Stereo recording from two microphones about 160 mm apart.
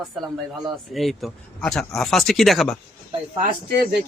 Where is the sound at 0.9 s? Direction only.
Centre (ahead or behind).